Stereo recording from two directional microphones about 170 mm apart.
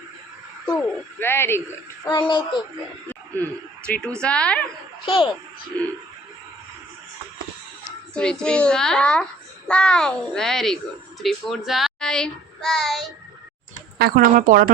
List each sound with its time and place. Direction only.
1.2 s a woman's voice: 15° left (ahead or behind)
2.0 s child singing: 30° left (ahead or behind)
3.8 s a woman's voice: 5° left (ahead or behind)
5.0 s child singing: 25° left (ahead or behind)
5.7 s a woman's voice: 5° left (ahead or behind)
8.1 s a child's voice: 5° left (ahead or behind)
14.0 s speech: 55° right (ahead or behind)